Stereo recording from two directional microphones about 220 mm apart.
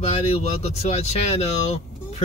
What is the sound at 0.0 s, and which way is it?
Speech, 30° left (ahead or behind).